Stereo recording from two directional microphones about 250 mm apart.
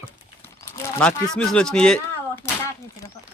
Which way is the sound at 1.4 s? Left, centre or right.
Centre.